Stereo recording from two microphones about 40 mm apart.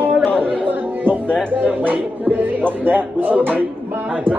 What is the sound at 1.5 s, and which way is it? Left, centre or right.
Speech, right.